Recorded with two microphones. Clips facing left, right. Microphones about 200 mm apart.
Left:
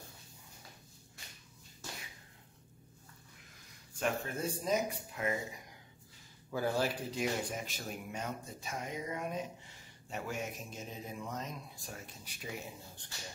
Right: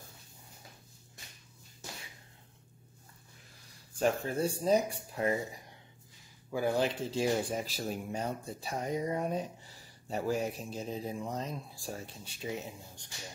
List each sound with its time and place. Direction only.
4.0 s speech: 35° right (ahead or behind)
6.5 s speech: 15° right (ahead or behind)